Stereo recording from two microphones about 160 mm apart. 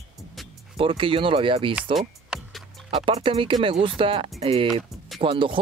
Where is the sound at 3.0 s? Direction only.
35° right (ahead or behind).